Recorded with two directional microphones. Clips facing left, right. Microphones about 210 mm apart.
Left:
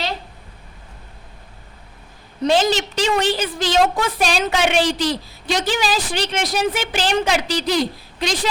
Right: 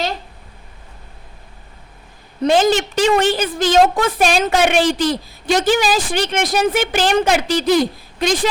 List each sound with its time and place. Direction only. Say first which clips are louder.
2.4 s a woman's voice: right 3 dB; 50° right (ahead or behind)